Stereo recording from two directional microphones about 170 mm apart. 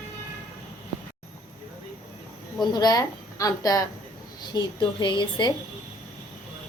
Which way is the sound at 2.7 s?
20° left (ahead or behind).